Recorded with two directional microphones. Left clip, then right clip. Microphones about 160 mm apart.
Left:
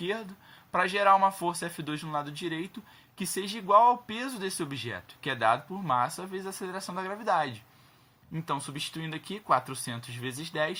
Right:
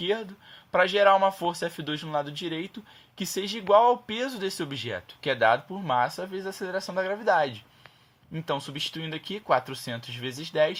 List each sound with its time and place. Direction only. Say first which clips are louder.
0.0 s speech: right 5 dB; 35° right (ahead or behind)